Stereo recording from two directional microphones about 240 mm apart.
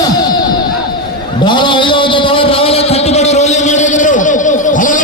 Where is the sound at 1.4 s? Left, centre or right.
Centre.